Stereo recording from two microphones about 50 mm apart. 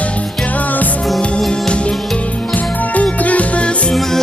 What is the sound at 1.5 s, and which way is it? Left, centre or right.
Music, centre.